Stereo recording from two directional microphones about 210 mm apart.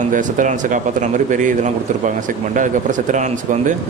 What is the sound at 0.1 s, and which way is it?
A man's voice, 40° right (ahead or behind).